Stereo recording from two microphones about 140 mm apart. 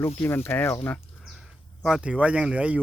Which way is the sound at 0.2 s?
15° left (ahead or behind).